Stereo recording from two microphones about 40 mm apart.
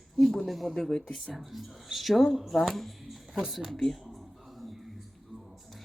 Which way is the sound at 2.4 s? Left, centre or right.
Centre.